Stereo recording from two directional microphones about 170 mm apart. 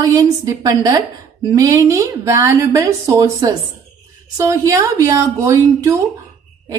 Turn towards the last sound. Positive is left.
turn(degrees=-15)  # may be behind; listen again after turning